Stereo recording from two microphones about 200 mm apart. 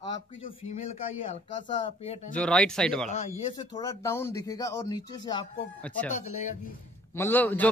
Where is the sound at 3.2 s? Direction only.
20° left (ahead or behind).